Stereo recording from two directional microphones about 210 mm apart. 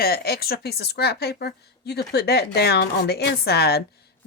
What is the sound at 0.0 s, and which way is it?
A woman's voice, 45° left (ahead or behind).